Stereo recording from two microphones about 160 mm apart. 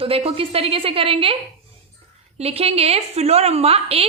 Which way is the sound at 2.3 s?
40° right (ahead or behind).